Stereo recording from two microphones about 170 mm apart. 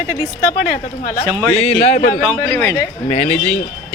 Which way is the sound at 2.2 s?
10° left (ahead or behind).